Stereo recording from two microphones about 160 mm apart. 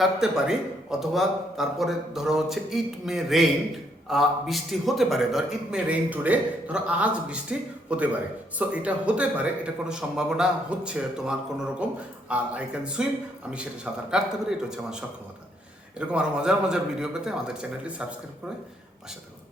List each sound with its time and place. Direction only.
0.0 s a man's voice: 5° right (ahead or behind)
14.1 s a man's voice: 5° right (ahead or behind)
16.0 s a man's voice: 5° right (ahead or behind)